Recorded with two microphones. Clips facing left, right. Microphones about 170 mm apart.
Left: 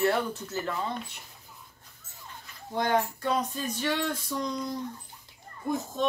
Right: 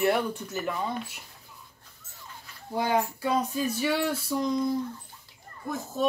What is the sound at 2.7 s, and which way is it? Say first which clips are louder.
Speech: even; 10° right (ahead or behind).